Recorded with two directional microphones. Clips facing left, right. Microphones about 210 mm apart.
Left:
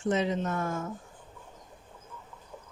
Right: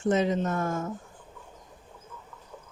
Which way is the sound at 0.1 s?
45° right (ahead or behind).